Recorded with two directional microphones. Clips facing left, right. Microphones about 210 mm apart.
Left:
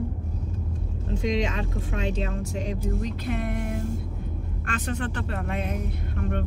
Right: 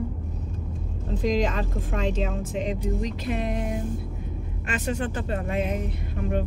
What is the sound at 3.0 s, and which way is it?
Speech, 55° left (ahead or behind).